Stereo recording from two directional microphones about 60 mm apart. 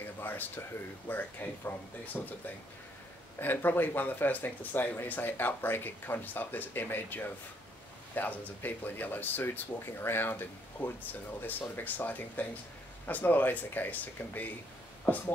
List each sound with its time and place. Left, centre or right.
0.2 s speech: left